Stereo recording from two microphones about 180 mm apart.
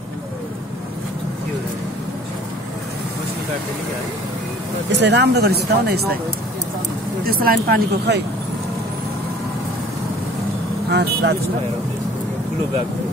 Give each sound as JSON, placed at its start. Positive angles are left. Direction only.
{"t": 4.9, "sound": "speech", "side_deg": -70}
{"t": 7.2, "sound": "speech", "side_deg": -55}
{"t": 10.9, "sound": "speech", "side_deg": -75}